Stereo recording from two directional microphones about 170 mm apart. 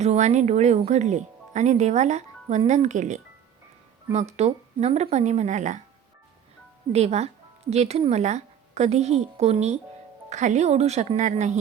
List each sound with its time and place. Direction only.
0.0 s a woman's voice: 40° right (ahead or behind)
6.9 s a woman's voice: 40° right (ahead or behind)